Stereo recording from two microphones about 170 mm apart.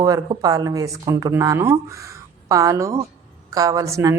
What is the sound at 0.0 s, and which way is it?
A woman's voice, 20° right (ahead or behind).